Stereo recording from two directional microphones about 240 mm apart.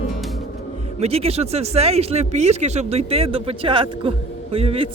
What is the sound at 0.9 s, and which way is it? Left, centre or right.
Speech, right.